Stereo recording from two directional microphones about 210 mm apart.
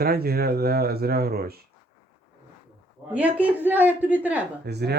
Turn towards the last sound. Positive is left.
turn(degrees=-50)  # may be behind; listen again after turning